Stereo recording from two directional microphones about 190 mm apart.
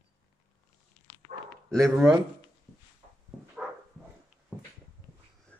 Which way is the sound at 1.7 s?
5° left (ahead or behind).